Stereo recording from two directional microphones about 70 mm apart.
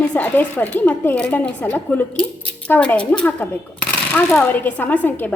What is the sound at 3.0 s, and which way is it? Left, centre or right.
Speech, centre.